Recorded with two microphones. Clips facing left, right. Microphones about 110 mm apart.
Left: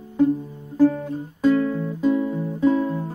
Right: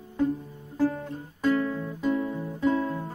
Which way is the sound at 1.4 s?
10° left (ahead or behind).